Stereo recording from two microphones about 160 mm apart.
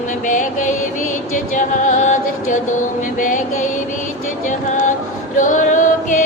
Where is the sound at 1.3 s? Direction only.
50° left (ahead or behind).